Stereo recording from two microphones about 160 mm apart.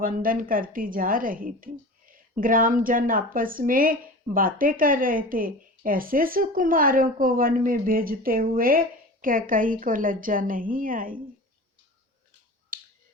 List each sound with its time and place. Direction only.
0.0 s a woman's voice: 60° right (ahead or behind)
12.7 s finger snapping: 60° right (ahead or behind)